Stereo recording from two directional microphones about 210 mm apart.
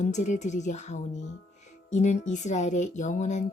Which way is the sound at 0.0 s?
35° left (ahead or behind).